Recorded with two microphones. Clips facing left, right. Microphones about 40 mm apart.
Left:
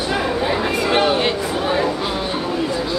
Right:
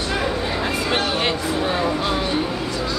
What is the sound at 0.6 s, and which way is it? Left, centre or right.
Chatter, centre.